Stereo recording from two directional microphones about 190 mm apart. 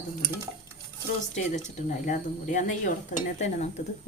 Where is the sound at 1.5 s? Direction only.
40° left (ahead or behind).